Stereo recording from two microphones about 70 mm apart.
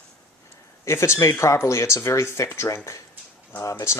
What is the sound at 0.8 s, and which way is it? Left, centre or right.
Speech, left.